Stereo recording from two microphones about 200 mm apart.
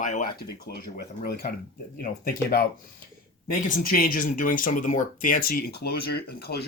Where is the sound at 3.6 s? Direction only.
40° left (ahead or behind).